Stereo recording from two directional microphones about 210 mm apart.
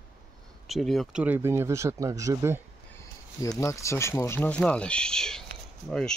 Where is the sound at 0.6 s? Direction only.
Centre (ahead or behind).